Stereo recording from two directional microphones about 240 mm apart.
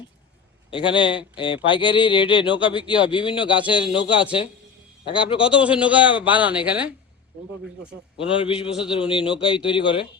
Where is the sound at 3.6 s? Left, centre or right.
Centre.